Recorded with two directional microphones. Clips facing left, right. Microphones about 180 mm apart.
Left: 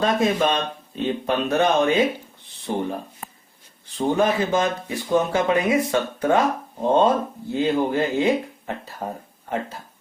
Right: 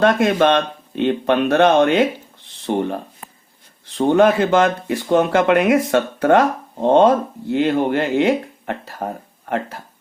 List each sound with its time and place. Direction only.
0.0 s speech: 70° right (ahead or behind)
3.8 s speech: 70° right (ahead or behind)